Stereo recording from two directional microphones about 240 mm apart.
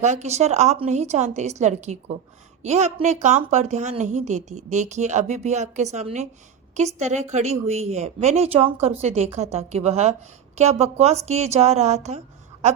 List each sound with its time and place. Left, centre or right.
0.0 s a woman's voice: right